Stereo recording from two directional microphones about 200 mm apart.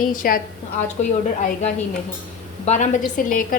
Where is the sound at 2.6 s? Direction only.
35° left (ahead or behind).